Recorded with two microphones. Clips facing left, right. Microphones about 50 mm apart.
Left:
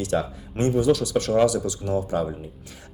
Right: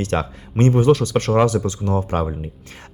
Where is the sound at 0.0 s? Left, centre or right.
Right.